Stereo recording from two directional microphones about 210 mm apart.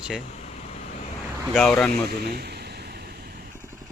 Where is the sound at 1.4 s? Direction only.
Centre (ahead or behind).